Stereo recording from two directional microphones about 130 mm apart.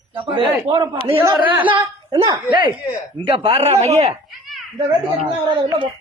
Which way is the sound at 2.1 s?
35° right (ahead or behind).